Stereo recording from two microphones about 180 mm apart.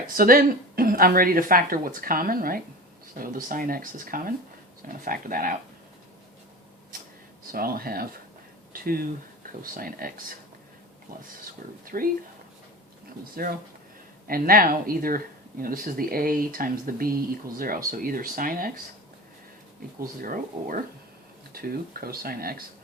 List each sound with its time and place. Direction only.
0.1 s speech: 55° right (ahead or behind)
7.5 s speech: 55° right (ahead or behind)
11.9 s speech: 50° right (ahead or behind)
13.3 s speech: 55° right (ahead or behind)
20.0 s speech: 50° right (ahead or behind)